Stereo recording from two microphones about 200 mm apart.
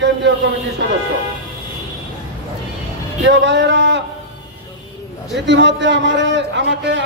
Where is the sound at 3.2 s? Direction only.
65° right (ahead or behind).